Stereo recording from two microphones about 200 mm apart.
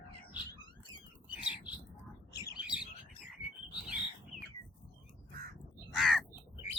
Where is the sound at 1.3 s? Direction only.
5° right (ahead or behind).